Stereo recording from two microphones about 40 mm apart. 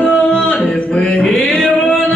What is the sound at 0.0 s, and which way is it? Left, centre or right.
Singing, left.